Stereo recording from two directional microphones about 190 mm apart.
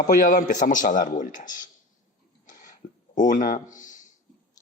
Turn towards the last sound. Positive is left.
turn(degrees=40)  # may be behind; listen again after turning